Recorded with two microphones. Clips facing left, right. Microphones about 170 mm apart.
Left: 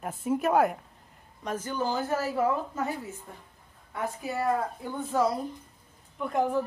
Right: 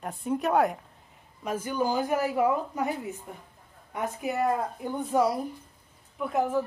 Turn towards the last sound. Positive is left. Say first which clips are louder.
# even
turn(degrees=-5)  # may be behind; listen again after turning